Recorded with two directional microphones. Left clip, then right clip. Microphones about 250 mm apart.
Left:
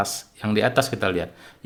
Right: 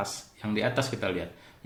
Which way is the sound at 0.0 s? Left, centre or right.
Left.